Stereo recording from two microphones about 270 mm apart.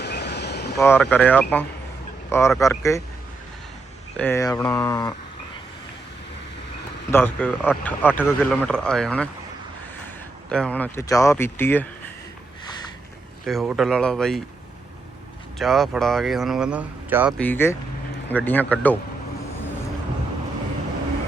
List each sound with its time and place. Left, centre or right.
0.0 s a sound: left
0.8 s speech: centre
4.2 s speech: centre
7.1 s speech: centre
10.5 s speech: centre
13.4 s speech: centre
15.5 s speech: centre
17.3 s speech: centre